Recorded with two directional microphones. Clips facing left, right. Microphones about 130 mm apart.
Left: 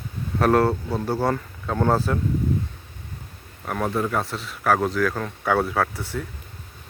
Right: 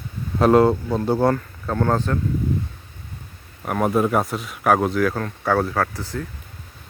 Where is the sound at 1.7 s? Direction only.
10° left (ahead or behind).